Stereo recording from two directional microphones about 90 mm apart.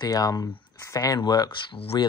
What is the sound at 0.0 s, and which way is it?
Speech, 45° left (ahead or behind).